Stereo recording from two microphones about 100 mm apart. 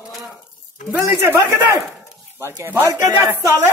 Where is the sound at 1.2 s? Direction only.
30° right (ahead or behind).